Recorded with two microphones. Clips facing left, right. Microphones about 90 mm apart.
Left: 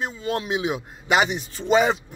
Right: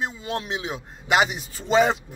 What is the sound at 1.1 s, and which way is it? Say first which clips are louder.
Speech: even; centre (ahead or behind).